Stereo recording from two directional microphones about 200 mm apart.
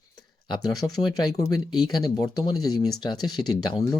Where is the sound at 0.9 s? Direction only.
20° left (ahead or behind).